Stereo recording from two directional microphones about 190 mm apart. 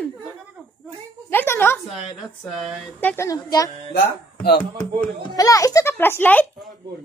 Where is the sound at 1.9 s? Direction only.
Centre (ahead or behind).